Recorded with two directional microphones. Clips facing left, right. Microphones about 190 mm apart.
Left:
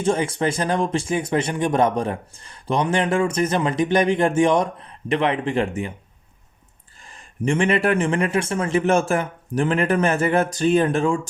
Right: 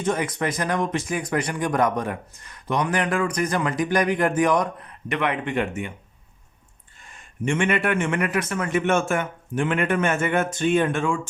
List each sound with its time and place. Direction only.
0.0 s speech: 30° left (ahead or behind)
7.0 s speech: 35° left (ahead or behind)